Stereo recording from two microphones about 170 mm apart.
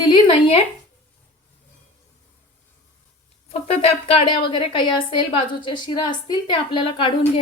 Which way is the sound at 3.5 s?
35° left (ahead or behind).